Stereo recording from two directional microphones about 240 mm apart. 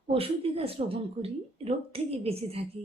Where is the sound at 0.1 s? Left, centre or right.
Right.